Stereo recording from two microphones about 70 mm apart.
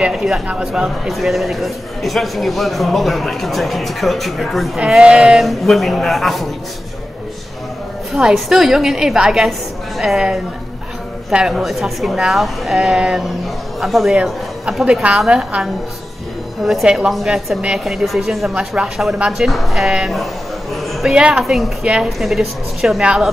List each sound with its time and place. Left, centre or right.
0.1 s a man's voice: centre
4.7 s a woman's voice: centre
5.4 s a man's voice: centre
8.1 s a man's voice: centre
11.5 s a man's voice: centre
16.8 s a woman's voice: centre
19.4 s a man's voice: centre
21.1 s a woman's voice: centre